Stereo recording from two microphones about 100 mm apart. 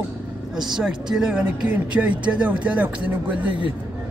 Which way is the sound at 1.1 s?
5° right (ahead or behind).